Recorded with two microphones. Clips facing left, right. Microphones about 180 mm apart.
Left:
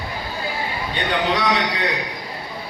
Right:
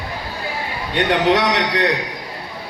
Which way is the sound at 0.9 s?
85° right.